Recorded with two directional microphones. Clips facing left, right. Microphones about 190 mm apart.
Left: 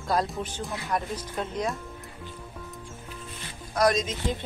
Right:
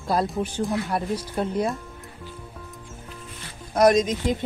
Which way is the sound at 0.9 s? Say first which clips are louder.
Right 2 dB; 30° right (ahead or behind).